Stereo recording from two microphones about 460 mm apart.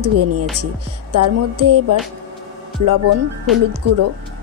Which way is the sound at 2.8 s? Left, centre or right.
Right.